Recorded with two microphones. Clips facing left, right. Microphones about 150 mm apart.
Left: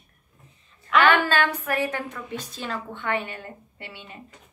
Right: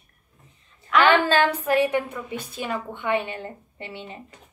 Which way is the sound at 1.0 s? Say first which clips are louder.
Right 3 dB; 25° right (ahead or behind).